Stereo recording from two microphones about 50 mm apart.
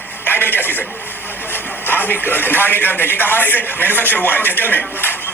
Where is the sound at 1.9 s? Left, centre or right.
Left.